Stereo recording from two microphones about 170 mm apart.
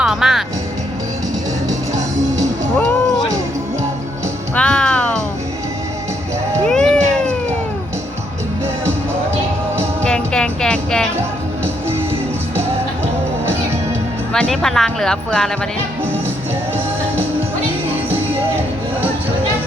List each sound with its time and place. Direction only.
0.0 s music: 5° right (ahead or behind)
1.9 s music: 20° right (ahead or behind)
2.7 s music: 5° left (ahead or behind)
4.5 s music: 5° left (ahead or behind)
6.7 s cat: 5° left (ahead or behind)
10.0 s music: 5° left (ahead or behind)
14.3 s a woman's voice: 5° left (ahead or behind)